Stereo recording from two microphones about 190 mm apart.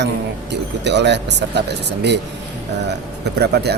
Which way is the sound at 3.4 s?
60° right (ahead or behind).